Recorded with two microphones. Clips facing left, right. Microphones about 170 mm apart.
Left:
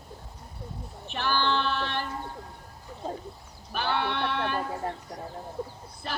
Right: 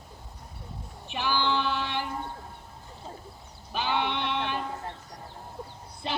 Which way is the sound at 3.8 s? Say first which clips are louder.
Even; 15° right (ahead or behind).